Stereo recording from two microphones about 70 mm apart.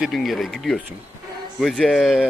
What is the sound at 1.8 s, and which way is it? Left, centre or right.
Speech, centre.